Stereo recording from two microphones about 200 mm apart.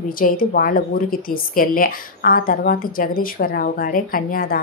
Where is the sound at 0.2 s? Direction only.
45° left (ahead or behind).